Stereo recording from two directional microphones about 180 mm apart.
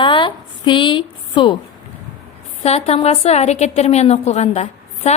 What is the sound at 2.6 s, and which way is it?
A woman's voice, 35° left (ahead or behind).